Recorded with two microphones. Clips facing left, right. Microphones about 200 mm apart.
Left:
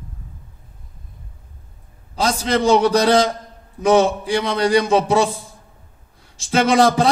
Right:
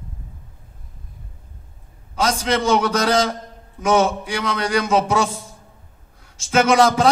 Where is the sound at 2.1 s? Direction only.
35° left (ahead or behind).